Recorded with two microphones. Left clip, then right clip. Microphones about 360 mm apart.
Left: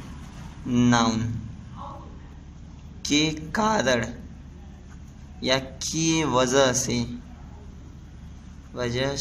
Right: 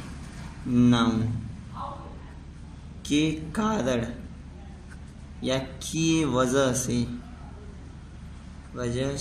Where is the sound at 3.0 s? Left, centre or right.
Left.